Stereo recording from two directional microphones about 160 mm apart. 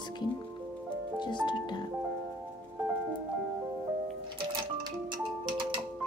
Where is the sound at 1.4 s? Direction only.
30° left (ahead or behind).